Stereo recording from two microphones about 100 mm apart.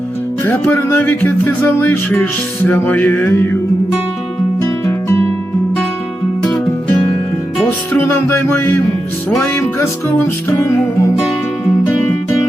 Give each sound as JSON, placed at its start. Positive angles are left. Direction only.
{"t": 0.4, "sound": "music", "side_deg": 20}
{"t": 4.9, "sound": "music", "side_deg": 25}
{"t": 7.9, "sound": "music", "side_deg": 20}
{"t": 11.2, "sound": "music", "side_deg": -10}